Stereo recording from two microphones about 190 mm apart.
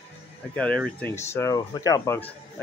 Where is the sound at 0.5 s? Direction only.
5° left (ahead or behind).